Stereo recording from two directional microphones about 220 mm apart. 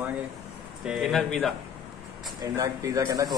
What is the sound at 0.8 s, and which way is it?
Speech, centre (ahead or behind).